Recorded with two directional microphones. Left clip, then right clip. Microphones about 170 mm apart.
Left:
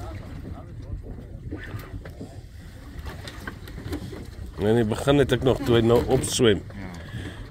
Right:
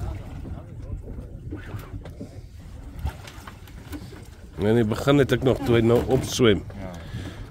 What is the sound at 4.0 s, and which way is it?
Speech, 50° right (ahead or behind).